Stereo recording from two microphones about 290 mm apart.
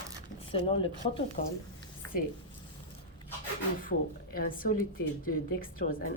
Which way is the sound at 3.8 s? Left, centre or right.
Left.